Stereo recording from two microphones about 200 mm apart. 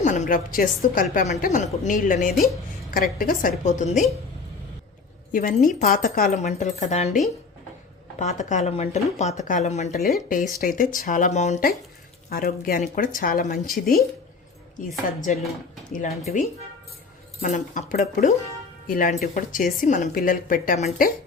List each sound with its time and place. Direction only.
0.0 s speech: 40° left (ahead or behind)
5.3 s speech: 40° left (ahead or behind)
8.2 s speech: 35° left (ahead or behind)
12.3 s speech: 45° left (ahead or behind)
17.4 s speech: 40° left (ahead or behind)